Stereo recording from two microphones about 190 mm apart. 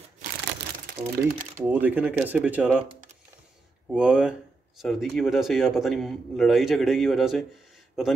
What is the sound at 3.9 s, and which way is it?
A man's voice, 5° right (ahead or behind).